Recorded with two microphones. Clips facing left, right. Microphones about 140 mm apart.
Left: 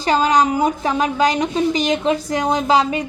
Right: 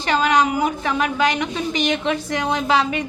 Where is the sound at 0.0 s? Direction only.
35° left (ahead or behind).